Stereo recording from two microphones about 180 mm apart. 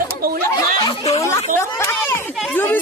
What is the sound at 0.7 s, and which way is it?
Speech, 20° left (ahead or behind).